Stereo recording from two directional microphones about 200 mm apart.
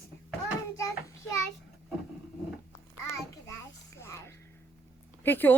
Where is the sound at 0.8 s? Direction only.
15° left (ahead or behind).